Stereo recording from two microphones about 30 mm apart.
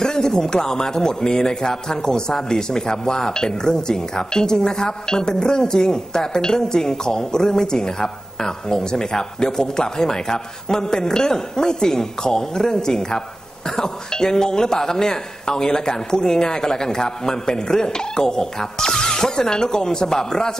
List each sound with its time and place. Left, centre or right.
0.0 s speech: centre